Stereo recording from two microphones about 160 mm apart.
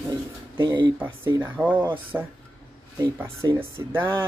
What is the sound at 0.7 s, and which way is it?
Speech, 25° right (ahead or behind).